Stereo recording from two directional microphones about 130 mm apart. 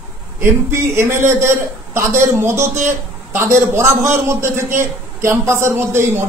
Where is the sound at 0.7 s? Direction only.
20° right (ahead or behind).